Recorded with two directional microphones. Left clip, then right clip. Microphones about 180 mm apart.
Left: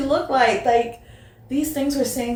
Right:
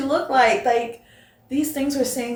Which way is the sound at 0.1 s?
10° left (ahead or behind).